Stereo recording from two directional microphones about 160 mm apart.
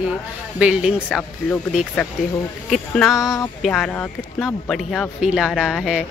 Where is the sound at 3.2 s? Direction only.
20° left (ahead or behind).